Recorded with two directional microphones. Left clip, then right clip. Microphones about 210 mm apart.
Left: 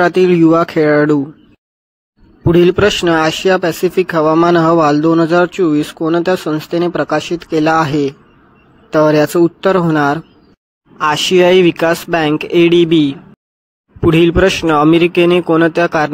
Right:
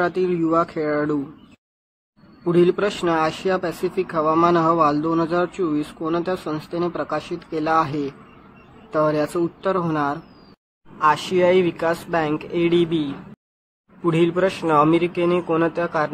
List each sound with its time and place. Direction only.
0.0 s a man's voice: 40° left (ahead or behind)
2.4 s a man's voice: 35° left (ahead or behind)